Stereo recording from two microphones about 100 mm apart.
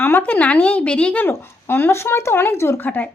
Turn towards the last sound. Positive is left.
turn(degrees=15)  # may be behind; listen again after turning